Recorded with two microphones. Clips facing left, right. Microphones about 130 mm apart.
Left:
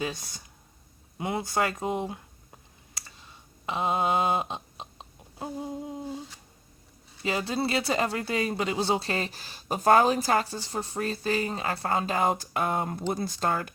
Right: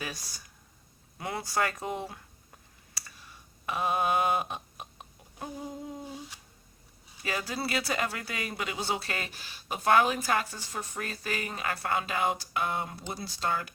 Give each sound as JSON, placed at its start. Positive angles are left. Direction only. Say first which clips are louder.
{"t": 0.0, "sound": "speech", "louder": "left 6 dB", "side_deg": 20}
{"t": 3.1, "sound": "a sound", "louder": "left 1 dB", "side_deg": 20}
{"t": 7.2, "sound": "speech", "louder": "left 5 dB", "side_deg": 25}